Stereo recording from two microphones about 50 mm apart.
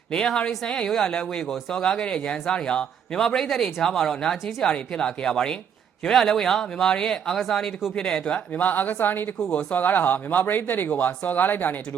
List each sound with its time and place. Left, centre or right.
0.1 s a man's voice: centre
8.5 s speech: left
9.4 s a man's voice: centre
9.7 s speech: left